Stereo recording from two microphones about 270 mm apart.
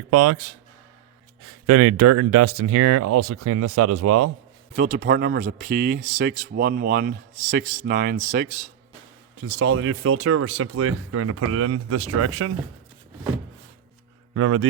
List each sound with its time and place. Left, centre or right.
0.1 s speech: right
1.6 s speech: right
4.7 s speech: right
9.4 s speech: right
14.3 s speech: right